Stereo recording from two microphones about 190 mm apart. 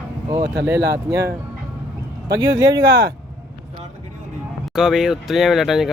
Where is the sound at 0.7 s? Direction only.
15° right (ahead or behind).